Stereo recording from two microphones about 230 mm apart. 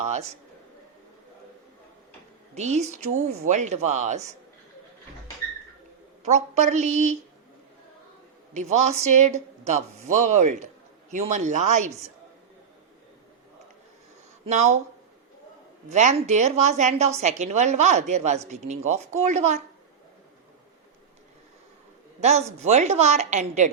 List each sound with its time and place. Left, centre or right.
0.0 s a man's voice: right
2.6 s a woman's voice: right
6.2 s a woman's voice: right
8.5 s a woman's voice: right
14.4 s a woman's voice: right
15.9 s a woman's voice: right
22.2 s a woman's voice: right